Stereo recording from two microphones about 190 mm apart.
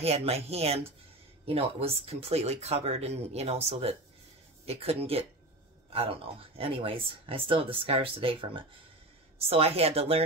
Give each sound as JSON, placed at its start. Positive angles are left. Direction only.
{"t": 0.0, "sound": "speech", "side_deg": -35}